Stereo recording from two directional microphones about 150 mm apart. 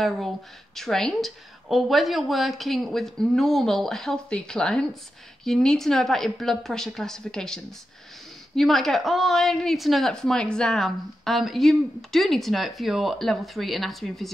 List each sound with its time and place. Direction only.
0.7 s a woman's voice: 5° left (ahead or behind)